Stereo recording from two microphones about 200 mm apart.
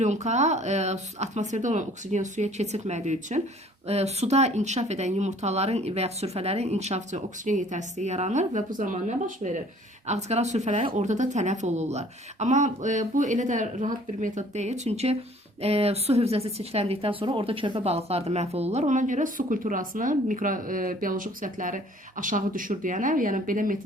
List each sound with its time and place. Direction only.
0.0 s speech: 35° right (ahead or behind)